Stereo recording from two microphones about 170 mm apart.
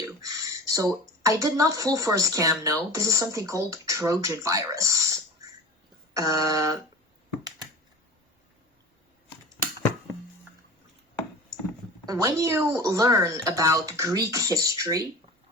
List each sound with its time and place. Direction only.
0.0 s a sound: 20° right (ahead or behind)
1.2 s speech: 20° right (ahead or behind)
12.0 s speech: 20° right (ahead or behind)